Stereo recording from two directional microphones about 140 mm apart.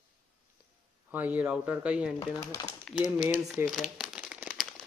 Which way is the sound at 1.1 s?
10° right (ahead or behind).